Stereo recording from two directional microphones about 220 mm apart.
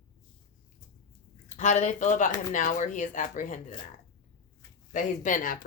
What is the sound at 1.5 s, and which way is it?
Speech, 35° left (ahead or behind).